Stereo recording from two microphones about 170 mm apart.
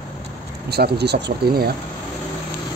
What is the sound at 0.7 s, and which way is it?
Speech, 70° right (ahead or behind).